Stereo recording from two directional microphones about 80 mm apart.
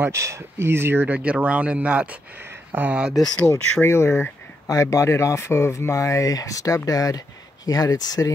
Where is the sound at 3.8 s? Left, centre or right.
Left.